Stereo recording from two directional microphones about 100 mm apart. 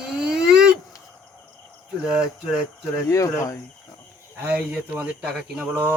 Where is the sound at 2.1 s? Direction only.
10° right (ahead or behind).